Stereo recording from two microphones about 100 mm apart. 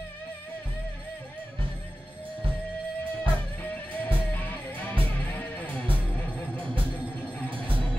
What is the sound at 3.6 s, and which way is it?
Music, 15° left (ahead or behind).